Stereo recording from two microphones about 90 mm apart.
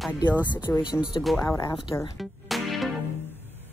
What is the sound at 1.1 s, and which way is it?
Speech, 50° left (ahead or behind).